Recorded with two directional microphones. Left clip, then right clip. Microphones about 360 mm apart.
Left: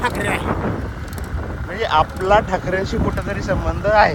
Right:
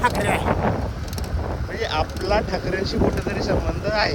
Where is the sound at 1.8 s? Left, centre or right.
Centre.